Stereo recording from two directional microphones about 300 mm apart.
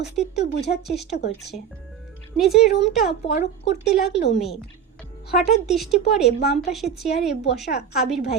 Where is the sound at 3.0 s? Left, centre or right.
Left.